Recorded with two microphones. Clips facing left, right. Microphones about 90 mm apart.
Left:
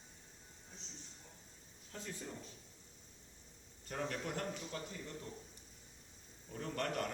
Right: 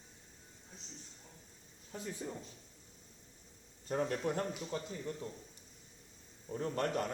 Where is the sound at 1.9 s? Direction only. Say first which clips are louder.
Right 5 dB; 15° right (ahead or behind).